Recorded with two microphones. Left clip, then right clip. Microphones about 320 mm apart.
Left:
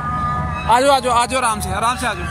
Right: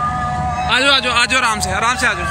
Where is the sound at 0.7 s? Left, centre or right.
Left.